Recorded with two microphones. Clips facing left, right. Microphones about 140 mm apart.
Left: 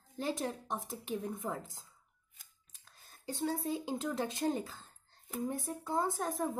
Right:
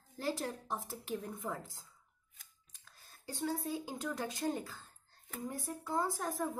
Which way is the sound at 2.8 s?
20° left (ahead or behind).